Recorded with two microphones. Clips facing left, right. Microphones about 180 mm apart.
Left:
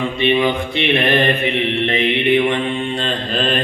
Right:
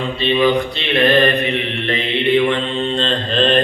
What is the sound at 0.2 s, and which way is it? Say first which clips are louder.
Mantra: right 2 dB; 20° left (ahead or behind).